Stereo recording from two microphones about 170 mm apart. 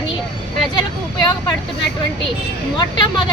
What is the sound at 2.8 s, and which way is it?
Speech, 25° left (ahead or behind).